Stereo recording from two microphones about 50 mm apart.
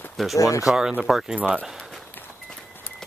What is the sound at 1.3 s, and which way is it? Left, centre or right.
Speech, centre.